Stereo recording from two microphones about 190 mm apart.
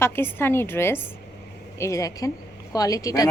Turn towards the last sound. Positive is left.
turn(degrees=20)  # may be behind; listen again after turning